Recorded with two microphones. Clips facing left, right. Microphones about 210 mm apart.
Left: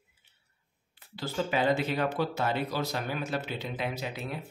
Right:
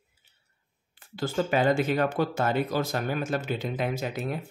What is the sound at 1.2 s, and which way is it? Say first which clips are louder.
Speech: right 4 dB; 50° right (ahead or behind).